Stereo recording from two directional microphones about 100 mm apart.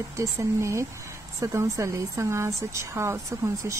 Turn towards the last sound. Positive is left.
turn(degrees=-30)  # may be behind; listen again after turning